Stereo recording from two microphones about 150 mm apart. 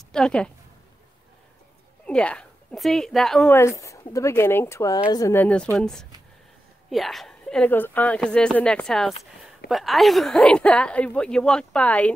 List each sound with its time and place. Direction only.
0.1 s a woman's voice: 5° left (ahead or behind)
2.0 s a woman's voice: 5° left (ahead or behind)
3.5 s speech: 20° left (ahead or behind)
5.3 s a woman's voice: 10° left (ahead or behind)